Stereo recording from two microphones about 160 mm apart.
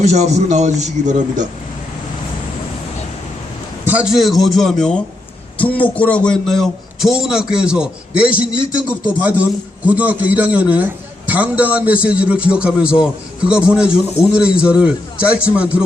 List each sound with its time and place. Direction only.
0.0 s a man's voice: 45° right (ahead or behind)
3.8 s a man's voice: 5° right (ahead or behind)